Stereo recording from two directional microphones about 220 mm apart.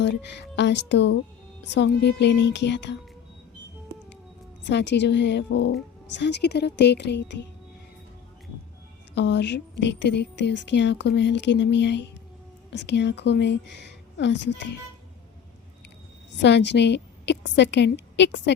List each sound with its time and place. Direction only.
0.0 s speech: 50° left (ahead or behind)
4.7 s speech: 50° left (ahead or behind)
9.1 s speech: 55° left (ahead or behind)
16.4 s speech: 50° left (ahead or behind)